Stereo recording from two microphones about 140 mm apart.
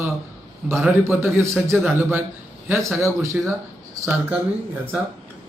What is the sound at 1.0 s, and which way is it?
A man's voice, 20° right (ahead or behind).